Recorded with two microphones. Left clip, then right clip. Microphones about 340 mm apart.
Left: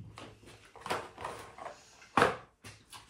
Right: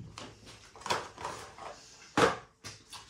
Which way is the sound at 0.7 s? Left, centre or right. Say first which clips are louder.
Right 2 dB; centre.